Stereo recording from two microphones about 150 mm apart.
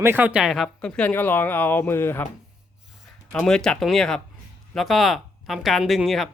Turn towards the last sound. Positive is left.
turn(degrees=0)  # may be behind; listen again after turning